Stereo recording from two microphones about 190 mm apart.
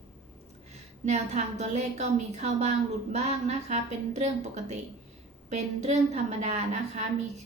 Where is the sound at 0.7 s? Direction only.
35° right (ahead or behind).